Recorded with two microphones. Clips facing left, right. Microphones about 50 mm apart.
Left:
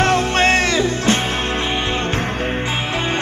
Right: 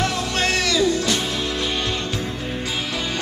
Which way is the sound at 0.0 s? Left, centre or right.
Left.